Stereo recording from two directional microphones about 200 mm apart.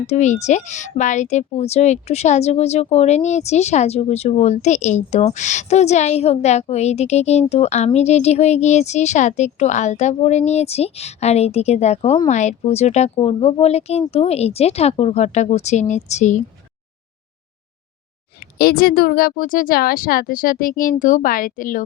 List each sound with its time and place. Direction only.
0.1 s speech: 35° left (ahead or behind)
18.3 s speech: 50° left (ahead or behind)